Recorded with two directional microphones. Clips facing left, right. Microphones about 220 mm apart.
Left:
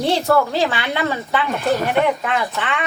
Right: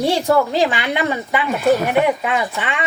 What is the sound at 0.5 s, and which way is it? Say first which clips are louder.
Speech: right 2 dB; 15° right (ahead or behind).